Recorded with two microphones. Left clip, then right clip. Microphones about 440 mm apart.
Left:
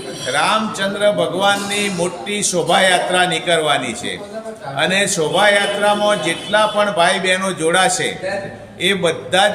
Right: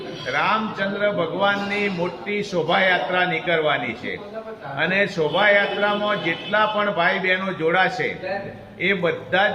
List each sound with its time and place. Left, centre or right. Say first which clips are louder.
0.3 s a man's voice: left 5 dB; right
4.8 s a man's voice: left 4 dB; right